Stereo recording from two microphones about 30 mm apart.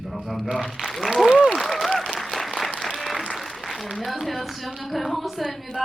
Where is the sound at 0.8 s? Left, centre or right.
Right.